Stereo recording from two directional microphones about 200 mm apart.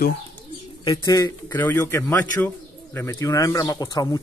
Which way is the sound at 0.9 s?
20° left (ahead or behind).